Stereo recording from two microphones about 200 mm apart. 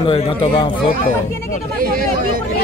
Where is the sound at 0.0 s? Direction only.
30° left (ahead or behind).